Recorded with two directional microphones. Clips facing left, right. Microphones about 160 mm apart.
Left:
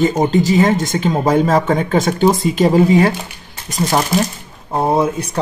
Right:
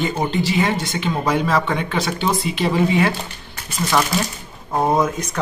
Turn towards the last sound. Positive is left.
turn(degrees=30)  # may be behind; listen again after turning